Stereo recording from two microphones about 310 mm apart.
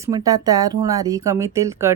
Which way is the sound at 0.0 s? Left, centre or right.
Centre.